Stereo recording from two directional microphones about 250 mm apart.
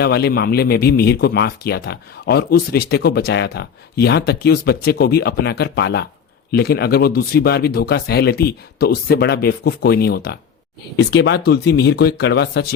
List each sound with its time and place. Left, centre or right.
0.0 s speech: left